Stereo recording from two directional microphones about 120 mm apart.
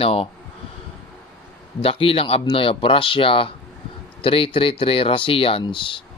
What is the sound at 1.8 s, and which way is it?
Speech, 55° left (ahead or behind).